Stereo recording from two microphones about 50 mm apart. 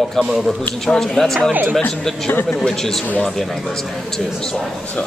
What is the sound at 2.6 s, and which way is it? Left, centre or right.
Speech, centre.